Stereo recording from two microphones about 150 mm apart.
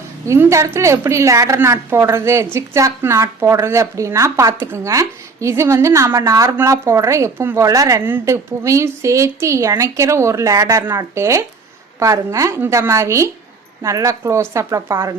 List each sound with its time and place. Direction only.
0.3 s a woman's voice: 15° right (ahead or behind)